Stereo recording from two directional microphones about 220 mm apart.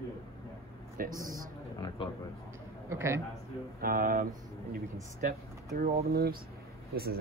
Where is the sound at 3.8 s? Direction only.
40° right (ahead or behind).